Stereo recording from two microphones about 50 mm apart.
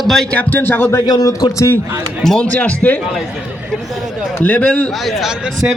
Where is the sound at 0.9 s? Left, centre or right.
Left.